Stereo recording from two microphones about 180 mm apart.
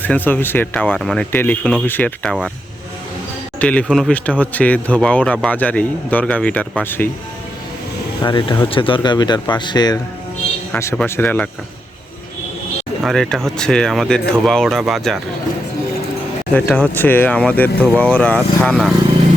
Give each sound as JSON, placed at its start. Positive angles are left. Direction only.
{"t": 0.0, "sound": "speech", "side_deg": 10}
{"t": 3.6, "sound": "speech", "side_deg": 5}
{"t": 8.2, "sound": "a man's voice", "side_deg": 25}
{"t": 13.1, "sound": "speech", "side_deg": 5}
{"t": 16.6, "sound": "speech", "side_deg": 10}